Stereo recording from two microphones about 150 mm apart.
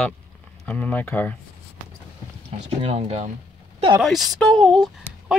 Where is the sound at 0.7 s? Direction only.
10° left (ahead or behind).